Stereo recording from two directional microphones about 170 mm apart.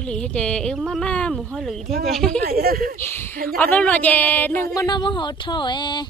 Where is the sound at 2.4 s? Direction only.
65° right (ahead or behind).